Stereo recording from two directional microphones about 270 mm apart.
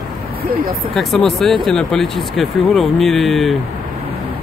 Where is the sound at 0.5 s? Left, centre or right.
Right.